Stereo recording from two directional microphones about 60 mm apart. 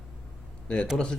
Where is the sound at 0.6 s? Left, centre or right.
Centre.